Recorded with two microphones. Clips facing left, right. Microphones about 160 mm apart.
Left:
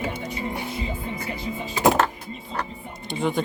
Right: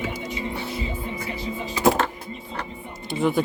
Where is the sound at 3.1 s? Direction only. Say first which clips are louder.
Right 3 dB; 5° right (ahead or behind).